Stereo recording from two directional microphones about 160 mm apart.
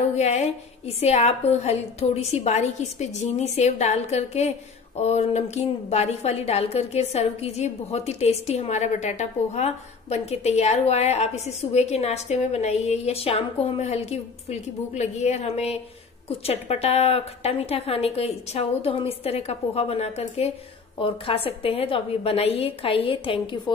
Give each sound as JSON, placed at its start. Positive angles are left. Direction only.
{"t": 0.1, "sound": "a woman's voice", "side_deg": 45}